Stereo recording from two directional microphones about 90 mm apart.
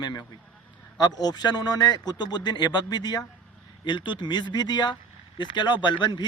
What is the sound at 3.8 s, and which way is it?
Speech, 60° left (ahead or behind).